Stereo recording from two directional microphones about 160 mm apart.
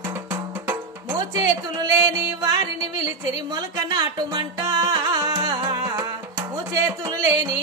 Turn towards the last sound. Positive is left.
turn(degrees=-25)  # may be behind; listen again after turning